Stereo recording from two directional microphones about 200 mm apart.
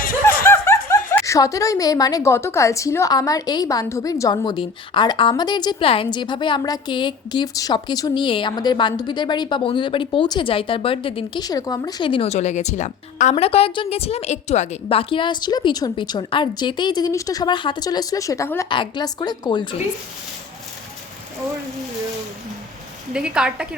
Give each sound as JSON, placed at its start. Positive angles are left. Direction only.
{"t": 0.4, "sound": "snicker", "side_deg": 15}
{"t": 1.1, "sound": "a woman's voice", "side_deg": 15}
{"t": 23.1, "sound": "a woman's voice", "side_deg": -5}